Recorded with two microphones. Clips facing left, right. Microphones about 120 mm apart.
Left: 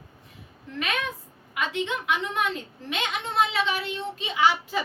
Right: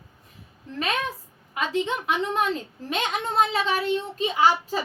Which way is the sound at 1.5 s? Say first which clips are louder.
Right 3 dB; 35° right (ahead or behind).